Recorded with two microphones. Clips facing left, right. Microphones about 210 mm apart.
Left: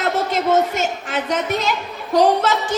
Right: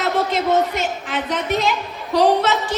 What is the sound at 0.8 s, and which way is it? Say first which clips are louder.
A woman's voice: left 1 dB; 45° left (ahead or behind).